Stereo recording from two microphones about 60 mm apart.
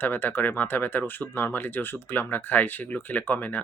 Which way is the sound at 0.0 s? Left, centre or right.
Left.